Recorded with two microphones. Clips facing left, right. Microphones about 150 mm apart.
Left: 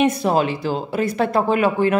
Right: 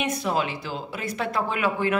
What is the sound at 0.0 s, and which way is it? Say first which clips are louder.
Speech: left 8 dB; 35° left (ahead or behind).